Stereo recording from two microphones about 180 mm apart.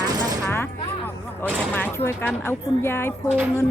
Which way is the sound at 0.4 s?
10° left (ahead or behind).